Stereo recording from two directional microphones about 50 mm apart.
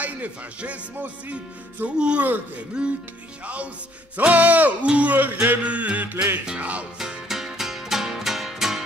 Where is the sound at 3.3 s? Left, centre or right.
Right.